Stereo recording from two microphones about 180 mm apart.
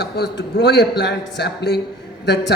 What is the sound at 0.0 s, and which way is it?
A man's voice, 65° left (ahead or behind).